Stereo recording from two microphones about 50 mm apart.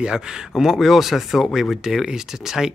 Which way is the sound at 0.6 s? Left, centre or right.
Centre.